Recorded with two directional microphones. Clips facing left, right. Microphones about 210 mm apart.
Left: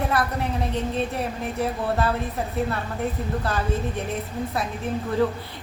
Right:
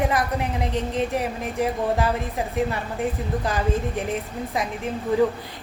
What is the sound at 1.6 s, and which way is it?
A woman's voice, 15° right (ahead or behind).